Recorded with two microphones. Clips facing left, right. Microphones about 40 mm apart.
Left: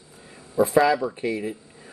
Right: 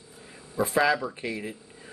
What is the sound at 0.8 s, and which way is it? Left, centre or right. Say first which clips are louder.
Speech: left 4 dB; centre.